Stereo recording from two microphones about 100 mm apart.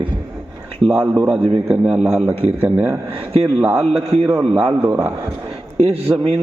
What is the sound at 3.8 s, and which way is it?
Speech, 70° right (ahead or behind).